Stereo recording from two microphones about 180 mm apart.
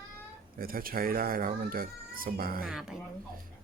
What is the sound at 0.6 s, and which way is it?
A child's voice, 55° right (ahead or behind).